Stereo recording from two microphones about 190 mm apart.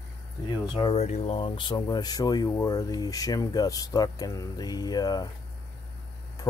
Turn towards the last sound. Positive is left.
turn(degrees=20)  # may be behind; listen again after turning